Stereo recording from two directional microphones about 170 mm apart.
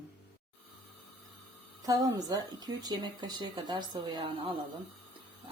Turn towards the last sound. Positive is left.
turn(degrees=-30)  # may be behind; listen again after turning